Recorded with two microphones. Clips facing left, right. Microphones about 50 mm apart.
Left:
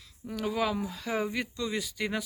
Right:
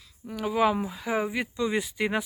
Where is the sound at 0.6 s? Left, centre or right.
Right.